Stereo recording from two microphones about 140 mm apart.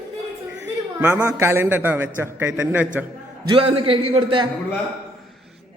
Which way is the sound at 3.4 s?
40° right (ahead or behind).